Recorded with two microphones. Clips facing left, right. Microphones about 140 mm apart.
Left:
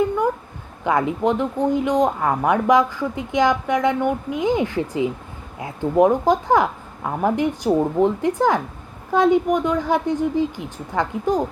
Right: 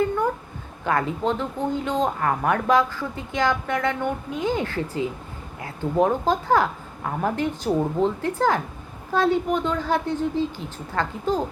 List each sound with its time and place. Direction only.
0.9 s speech: 15° left (ahead or behind)